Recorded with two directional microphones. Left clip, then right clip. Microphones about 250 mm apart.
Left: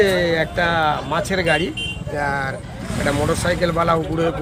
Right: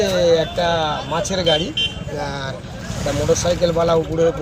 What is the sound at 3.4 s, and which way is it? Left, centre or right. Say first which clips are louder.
Speech: right 1 dB; left.